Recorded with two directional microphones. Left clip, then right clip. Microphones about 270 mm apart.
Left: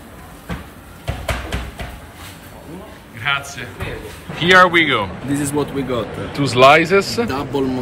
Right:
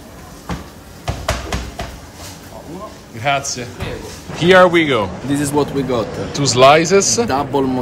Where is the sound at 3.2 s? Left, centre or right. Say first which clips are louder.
Right 3 dB; right.